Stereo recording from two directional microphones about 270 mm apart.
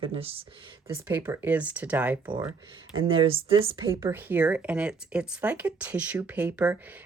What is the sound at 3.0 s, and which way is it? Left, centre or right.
Speech, right.